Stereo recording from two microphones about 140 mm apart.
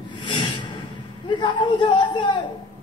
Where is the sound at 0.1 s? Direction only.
35° left (ahead or behind).